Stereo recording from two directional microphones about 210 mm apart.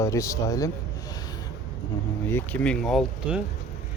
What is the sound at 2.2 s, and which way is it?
Speech, 10° left (ahead or behind).